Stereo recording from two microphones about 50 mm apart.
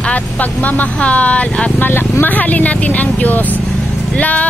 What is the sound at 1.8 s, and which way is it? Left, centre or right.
Speech, left.